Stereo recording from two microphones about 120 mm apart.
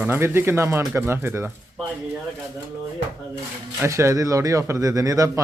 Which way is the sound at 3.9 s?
25° right (ahead or behind).